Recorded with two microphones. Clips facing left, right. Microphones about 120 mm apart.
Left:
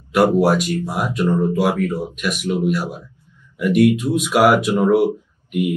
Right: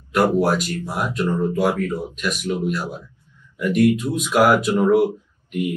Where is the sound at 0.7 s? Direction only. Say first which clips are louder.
Left 2 dB; 15° left (ahead or behind).